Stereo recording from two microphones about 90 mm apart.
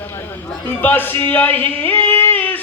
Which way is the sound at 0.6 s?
20° left (ahead or behind).